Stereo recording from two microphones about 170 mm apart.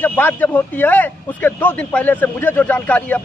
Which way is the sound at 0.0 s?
10° left (ahead or behind).